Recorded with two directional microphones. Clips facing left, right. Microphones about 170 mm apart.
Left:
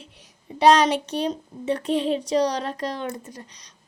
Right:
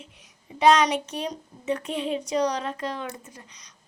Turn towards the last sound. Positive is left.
turn(degrees=35)  # may be behind; listen again after turning